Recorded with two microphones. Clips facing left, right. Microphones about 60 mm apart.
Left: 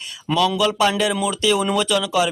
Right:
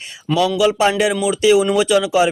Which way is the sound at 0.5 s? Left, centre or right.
Centre.